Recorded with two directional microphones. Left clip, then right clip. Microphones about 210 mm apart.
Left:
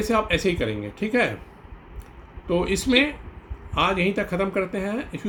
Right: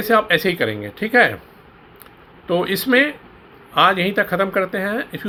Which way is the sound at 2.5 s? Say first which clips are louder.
Right 5 dB; 5° right (ahead or behind).